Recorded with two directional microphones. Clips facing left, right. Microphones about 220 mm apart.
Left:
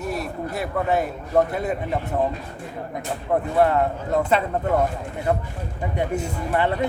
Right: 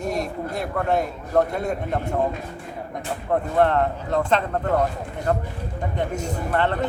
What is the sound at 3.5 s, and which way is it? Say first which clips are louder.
Speech: even; 10° left (ahead or behind).